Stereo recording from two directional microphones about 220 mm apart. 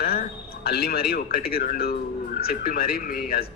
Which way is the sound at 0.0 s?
45° left (ahead or behind).